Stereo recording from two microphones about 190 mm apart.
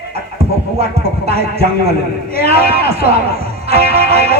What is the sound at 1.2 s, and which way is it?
Speech, 35° right (ahead or behind).